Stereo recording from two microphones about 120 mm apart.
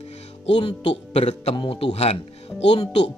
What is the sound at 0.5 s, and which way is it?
Speech, 50° left (ahead or behind).